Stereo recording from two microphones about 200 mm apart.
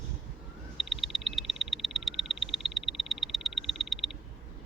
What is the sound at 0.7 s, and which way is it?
Frog, centre (ahead or behind).